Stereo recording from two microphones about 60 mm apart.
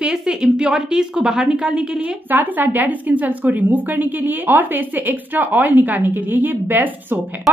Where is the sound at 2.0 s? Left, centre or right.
Right.